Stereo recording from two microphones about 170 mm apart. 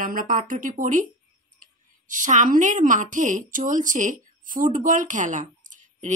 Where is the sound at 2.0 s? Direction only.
50° right (ahead or behind).